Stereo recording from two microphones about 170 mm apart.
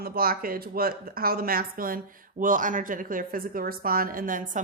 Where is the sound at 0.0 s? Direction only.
60° right (ahead or behind).